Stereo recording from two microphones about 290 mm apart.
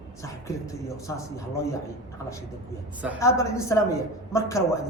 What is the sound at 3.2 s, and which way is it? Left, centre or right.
A woman's voice, centre.